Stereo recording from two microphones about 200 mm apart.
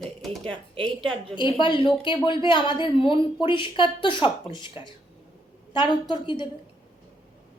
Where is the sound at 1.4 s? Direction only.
25° left (ahead or behind).